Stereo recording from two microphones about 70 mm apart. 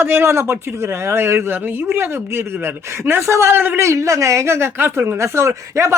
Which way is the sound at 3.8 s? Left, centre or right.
Right.